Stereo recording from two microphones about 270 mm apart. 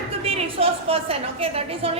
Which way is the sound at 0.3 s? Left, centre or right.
Right.